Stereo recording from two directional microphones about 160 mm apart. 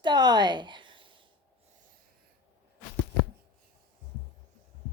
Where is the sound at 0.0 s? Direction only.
25° right (ahead or behind).